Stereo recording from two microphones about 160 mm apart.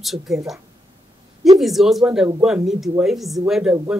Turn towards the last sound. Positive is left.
turn(degrees=-5)  # may be behind; listen again after turning